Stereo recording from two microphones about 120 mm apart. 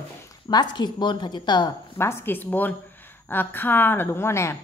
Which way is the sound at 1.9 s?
20° left (ahead or behind).